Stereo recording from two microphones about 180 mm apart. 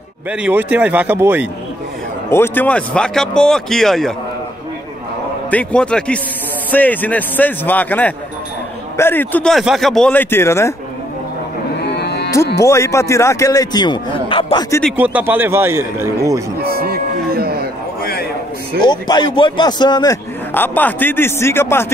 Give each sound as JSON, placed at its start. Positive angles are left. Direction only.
{"t": 0.3, "sound": "a man's voice", "side_deg": -10}
{"t": 2.3, "sound": "a man's voice", "side_deg": 10}
{"t": 5.5, "sound": "a man's voice", "side_deg": 5}
{"t": 11.8, "sound": "cattle", "side_deg": 65}
{"t": 12.6, "sound": "a man's voice", "side_deg": 15}
{"t": 15.0, "sound": "a man's voice", "side_deg": -10}
{"t": 16.6, "sound": "music", "side_deg": -60}
{"t": 18.8, "sound": "speech", "side_deg": 25}
{"t": 20.5, "sound": "a man's voice", "side_deg": 10}